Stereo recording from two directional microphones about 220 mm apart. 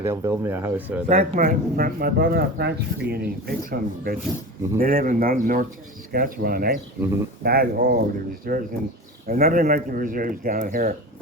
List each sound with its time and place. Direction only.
0.0 s speech: 10° right (ahead or behind)
1.0 s speech: 35° right (ahead or behind)